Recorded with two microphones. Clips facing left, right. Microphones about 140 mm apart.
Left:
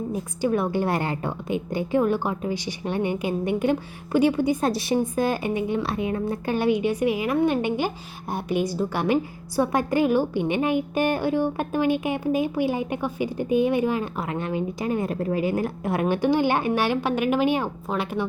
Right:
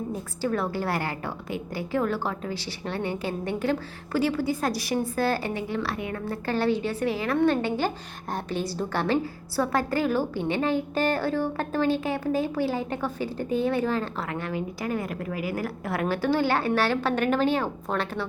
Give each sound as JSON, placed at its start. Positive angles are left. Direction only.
{"t": 0.1, "sound": "a woman's voice", "side_deg": 15}